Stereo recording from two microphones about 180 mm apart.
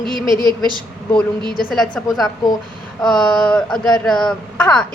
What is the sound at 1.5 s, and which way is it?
Speech, 50° left (ahead or behind).